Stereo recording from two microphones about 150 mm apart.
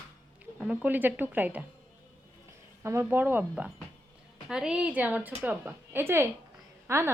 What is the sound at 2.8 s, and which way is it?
A woman's voice, 15° right (ahead or behind).